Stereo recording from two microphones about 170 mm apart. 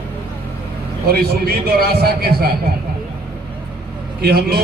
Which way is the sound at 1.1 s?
65° right (ahead or behind).